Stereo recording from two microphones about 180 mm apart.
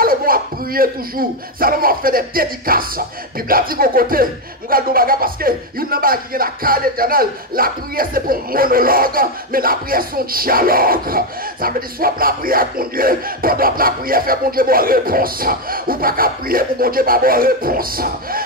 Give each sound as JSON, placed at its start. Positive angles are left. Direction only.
{"t": 0.0, "sound": "a man's voice", "side_deg": -55}